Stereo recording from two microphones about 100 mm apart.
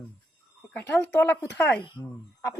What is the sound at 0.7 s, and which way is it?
Speech, 20° left (ahead or behind).